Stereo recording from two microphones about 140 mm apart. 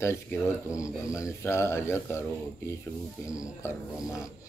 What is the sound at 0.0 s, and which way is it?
Speech, 20° left (ahead or behind).